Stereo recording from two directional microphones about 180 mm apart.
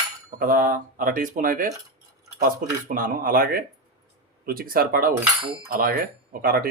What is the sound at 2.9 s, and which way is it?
Speech, 50° right (ahead or behind).